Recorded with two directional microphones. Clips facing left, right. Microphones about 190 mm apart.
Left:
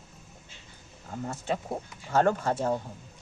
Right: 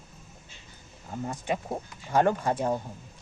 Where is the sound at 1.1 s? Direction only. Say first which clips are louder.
Right 1 dB; 15° right (ahead or behind).